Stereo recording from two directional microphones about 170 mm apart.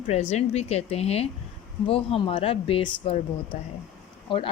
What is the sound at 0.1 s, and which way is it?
A woman's voice, 40° left (ahead or behind).